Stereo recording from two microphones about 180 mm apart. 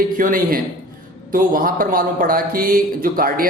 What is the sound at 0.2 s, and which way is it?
A man's voice, 50° right (ahead or behind).